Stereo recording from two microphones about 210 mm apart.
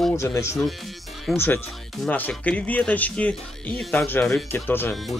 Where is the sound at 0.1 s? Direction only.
15° left (ahead or behind).